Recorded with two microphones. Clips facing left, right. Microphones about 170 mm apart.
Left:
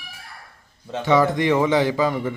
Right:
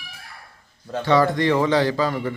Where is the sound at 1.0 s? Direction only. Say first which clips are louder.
Even; 20° left (ahead or behind).